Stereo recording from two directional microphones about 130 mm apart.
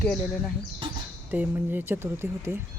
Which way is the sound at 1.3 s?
15° right (ahead or behind).